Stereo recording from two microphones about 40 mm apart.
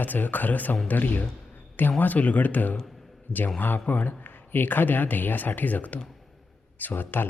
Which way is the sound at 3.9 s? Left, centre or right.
Left.